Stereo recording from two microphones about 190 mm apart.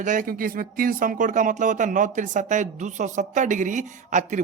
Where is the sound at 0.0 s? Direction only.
45° right (ahead or behind).